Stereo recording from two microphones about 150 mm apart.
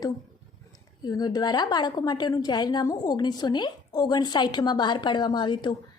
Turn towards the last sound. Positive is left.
turn(degrees=30)  # may be behind; listen again after turning